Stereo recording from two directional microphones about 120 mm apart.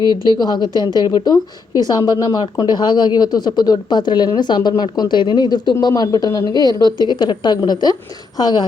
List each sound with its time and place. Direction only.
0.3 s a woman's voice: 35° left (ahead or behind)